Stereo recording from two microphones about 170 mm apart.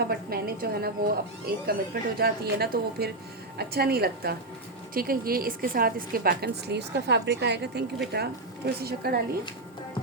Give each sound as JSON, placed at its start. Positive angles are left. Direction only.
{"t": 0.0, "sound": "a woman's voice", "side_deg": -65}